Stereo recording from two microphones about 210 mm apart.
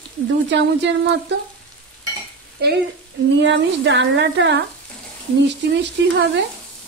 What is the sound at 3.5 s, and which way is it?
A woman's voice, 55° right (ahead or behind).